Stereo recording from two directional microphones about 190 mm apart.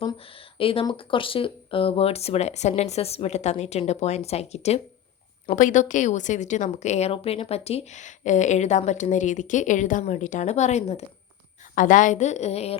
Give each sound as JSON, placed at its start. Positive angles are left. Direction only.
{"t": 0.6, "sound": "speech", "side_deg": 30}